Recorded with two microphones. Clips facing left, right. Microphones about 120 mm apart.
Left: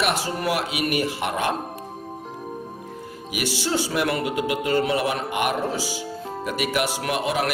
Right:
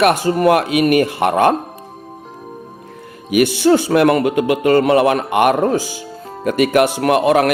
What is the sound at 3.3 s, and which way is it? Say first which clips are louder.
A man's voice: right 13 dB; 55° right (ahead or behind).